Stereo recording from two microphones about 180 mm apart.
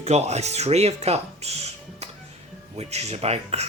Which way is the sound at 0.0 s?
35° right (ahead or behind).